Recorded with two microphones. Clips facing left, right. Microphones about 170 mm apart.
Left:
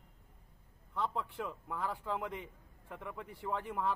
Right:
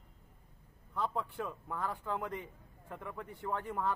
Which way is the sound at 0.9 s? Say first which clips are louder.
Right 1 dB; centre (ahead or behind).